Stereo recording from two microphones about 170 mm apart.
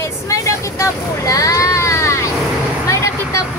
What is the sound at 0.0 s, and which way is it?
Vehicle, 15° left (ahead or behind).